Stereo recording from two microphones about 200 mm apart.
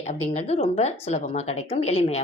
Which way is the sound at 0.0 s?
35° left (ahead or behind).